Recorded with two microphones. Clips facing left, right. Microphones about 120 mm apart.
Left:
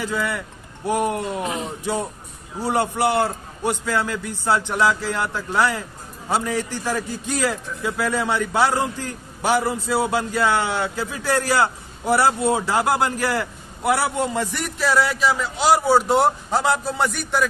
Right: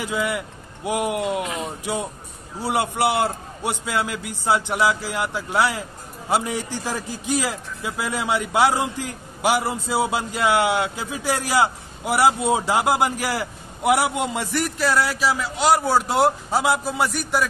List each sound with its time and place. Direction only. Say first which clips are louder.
0.0 s speech: even; 15° right (ahead or behind)
2.6 s a man's voice: left 1 dB; 10° right (ahead or behind)
14.5 s a man's voice: even; centre (ahead or behind)